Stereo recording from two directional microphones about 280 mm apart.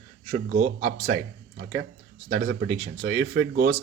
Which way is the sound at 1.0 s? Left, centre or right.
Right.